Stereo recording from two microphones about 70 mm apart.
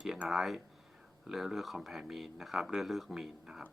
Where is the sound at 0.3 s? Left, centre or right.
Centre.